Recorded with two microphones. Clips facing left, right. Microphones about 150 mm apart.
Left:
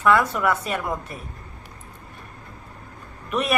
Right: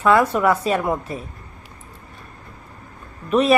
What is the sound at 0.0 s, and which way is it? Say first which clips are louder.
Speech: right 3 dB; 25° right (ahead or behind).